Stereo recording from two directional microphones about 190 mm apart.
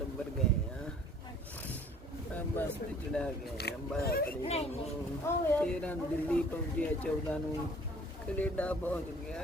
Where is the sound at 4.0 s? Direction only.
55° left (ahead or behind).